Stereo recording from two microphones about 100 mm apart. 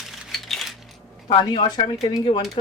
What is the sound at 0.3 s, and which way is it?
Coin, centre (ahead or behind).